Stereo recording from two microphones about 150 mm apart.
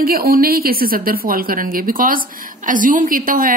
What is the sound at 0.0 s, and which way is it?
A woman's voice, 80° right.